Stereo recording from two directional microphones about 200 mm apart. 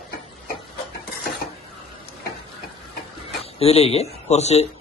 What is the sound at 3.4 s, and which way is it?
Speech, 30° left (ahead or behind).